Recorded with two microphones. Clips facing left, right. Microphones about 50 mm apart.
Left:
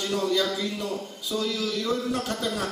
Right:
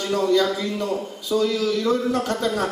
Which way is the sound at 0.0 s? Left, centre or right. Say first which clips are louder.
Right 6 dB; centre.